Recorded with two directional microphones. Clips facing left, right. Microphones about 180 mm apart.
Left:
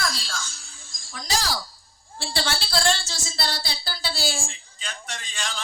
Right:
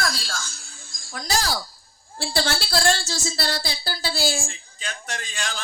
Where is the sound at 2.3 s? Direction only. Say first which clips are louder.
Right 3 dB; 45° right (ahead or behind).